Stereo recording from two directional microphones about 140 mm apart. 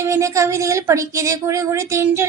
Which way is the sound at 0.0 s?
20° right (ahead or behind).